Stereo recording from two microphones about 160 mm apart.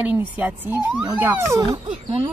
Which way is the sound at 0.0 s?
10° right (ahead or behind).